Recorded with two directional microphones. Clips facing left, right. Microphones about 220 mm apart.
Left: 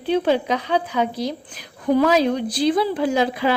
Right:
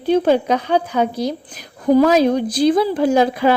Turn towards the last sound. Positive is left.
turn(degrees=-45)  # may be behind; listen again after turning